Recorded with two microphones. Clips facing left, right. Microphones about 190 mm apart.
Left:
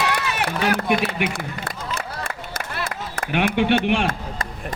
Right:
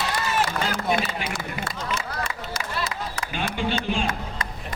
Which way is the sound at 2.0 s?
55° left (ahead or behind).